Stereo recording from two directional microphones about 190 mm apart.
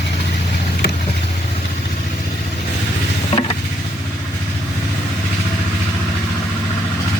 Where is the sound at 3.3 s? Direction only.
30° left (ahead or behind).